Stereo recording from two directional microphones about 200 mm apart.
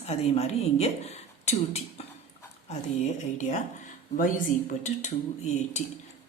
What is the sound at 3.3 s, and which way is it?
Speech, 35° left (ahead or behind).